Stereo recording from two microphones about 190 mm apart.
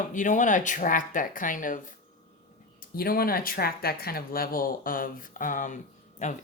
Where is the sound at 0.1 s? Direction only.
40° left (ahead or behind).